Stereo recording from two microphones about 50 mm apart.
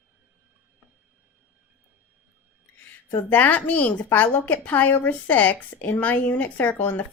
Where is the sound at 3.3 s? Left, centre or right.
Left.